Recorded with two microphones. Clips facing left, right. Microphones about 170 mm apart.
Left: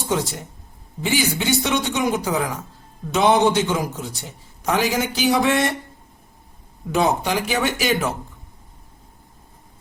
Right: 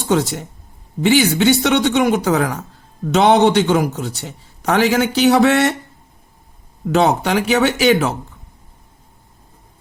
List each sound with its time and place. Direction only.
0.1 s a man's voice: 75° right (ahead or behind)
6.9 s a man's voice: 70° right (ahead or behind)